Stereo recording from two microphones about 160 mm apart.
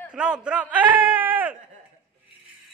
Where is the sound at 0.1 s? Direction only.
5° right (ahead or behind).